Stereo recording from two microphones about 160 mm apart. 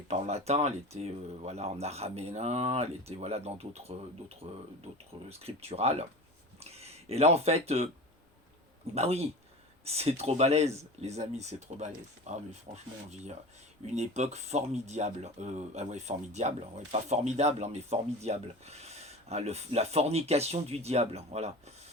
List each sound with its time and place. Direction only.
0.1 s speech: 40° right (ahead or behind)
9.0 s speech: 40° right (ahead or behind)